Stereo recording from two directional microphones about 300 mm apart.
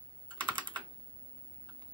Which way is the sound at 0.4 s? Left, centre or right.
Centre.